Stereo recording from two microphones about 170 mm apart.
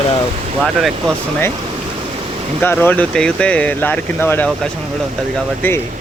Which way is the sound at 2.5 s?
10° left (ahead or behind).